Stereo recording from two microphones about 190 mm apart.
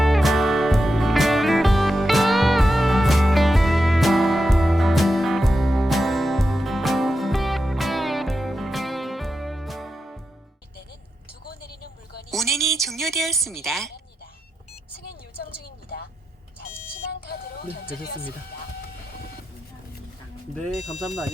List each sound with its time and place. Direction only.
0.0 s music: centre (ahead or behind)
11.4 s vehicle: 55° left (ahead or behind)
12.3 s a sound: centre (ahead or behind)
17.2 s music: 55° left (ahead or behind)